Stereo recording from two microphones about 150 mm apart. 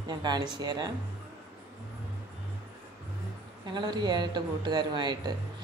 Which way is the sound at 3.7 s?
30° right (ahead or behind).